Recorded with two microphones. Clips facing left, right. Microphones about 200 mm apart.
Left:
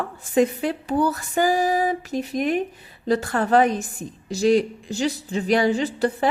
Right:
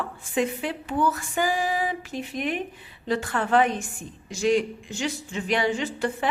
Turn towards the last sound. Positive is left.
turn(degrees=35)  # may be behind; listen again after turning